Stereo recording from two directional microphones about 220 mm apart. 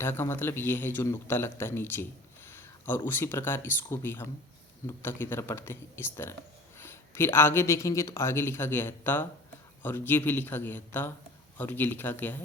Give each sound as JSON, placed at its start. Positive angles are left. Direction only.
{"t": 0.0, "sound": "speech", "side_deg": 10}